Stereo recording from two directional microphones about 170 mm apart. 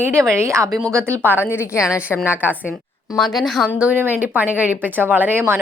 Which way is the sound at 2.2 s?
10° right (ahead or behind).